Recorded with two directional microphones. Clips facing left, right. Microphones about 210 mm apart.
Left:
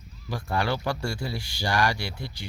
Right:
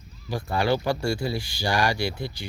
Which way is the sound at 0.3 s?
30° right (ahead or behind).